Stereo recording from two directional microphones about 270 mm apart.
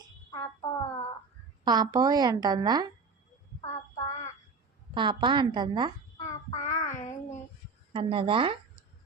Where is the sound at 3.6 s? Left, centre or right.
Left.